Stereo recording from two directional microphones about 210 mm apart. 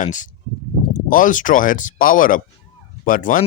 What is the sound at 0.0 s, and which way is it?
Speech, 35° left (ahead or behind).